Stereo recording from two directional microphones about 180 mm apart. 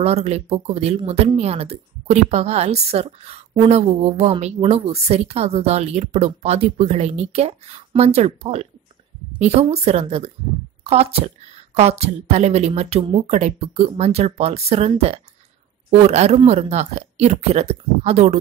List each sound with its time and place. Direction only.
0.0 s speech: 35° right (ahead or behind)